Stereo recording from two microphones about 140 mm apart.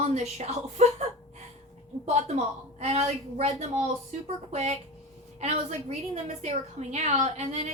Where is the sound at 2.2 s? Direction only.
50° right (ahead or behind).